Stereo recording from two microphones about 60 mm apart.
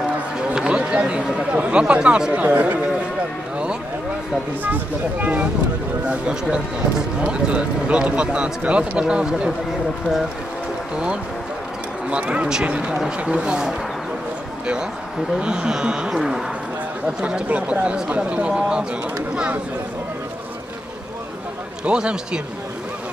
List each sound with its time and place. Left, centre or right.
0.6 s speech: centre
2.4 s speech: right
5.2 s speech: right
12.1 s speech: centre
15.3 s speech: centre
21.8 s speech: centre